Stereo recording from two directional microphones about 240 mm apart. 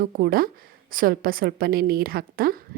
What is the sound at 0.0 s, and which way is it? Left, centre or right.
A woman's voice, right.